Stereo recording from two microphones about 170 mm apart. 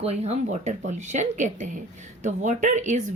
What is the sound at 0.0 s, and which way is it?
A woman's voice, 40° right (ahead or behind).